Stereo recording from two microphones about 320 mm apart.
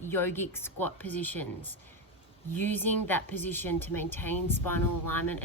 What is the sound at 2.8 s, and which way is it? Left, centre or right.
Speech, left.